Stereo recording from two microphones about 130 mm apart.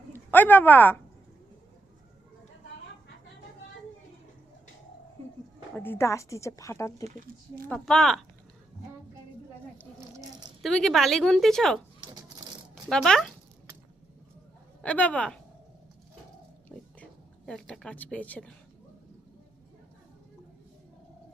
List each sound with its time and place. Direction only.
0.1 s a woman's voice: 15° left (ahead or behind)
5.7 s speech: 15° left (ahead or behind)
7.7 s a woman's voice: 5° left (ahead or behind)
10.0 s a sound: 25° right (ahead or behind)
10.6 s a woman's voice: 5° left (ahead or behind)
12.9 s a woman's voice: 5° left (ahead or behind)
14.8 s speech: 10° left (ahead or behind)
16.6 s a sound: 10° left (ahead or behind)